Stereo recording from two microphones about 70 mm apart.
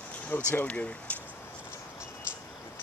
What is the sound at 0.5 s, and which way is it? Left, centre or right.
Speech, left.